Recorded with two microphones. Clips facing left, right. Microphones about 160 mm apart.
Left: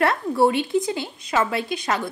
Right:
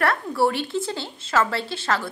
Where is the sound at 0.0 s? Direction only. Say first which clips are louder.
Left 3 dB; 20° left (ahead or behind).